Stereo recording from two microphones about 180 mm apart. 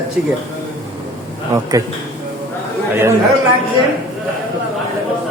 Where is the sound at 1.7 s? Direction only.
20° right (ahead or behind).